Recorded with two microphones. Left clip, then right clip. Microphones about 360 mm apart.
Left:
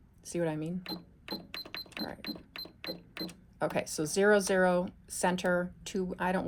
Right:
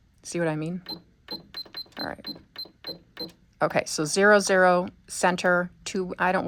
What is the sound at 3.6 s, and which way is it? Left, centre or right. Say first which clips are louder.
Speech: right 8 dB; right.